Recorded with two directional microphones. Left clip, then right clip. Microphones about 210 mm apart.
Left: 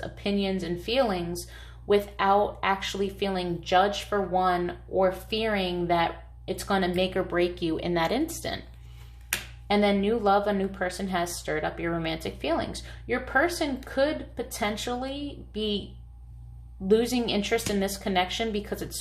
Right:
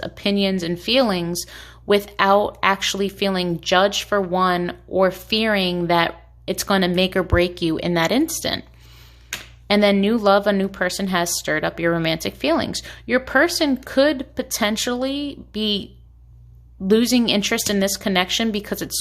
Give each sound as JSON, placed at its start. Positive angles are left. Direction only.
{"t": 0.0, "sound": "a woman's voice", "side_deg": -50}
{"t": 9.6, "sound": "a woman's voice", "side_deg": -45}
{"t": 16.9, "sound": "a woman's voice", "side_deg": -50}